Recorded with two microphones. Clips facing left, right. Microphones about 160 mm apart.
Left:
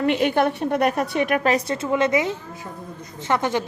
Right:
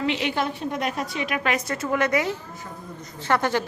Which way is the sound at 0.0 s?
50° left (ahead or behind).